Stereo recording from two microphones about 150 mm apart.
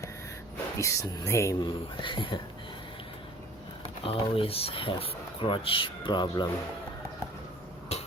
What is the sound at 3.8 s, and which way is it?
Speech, 40° left (ahead or behind).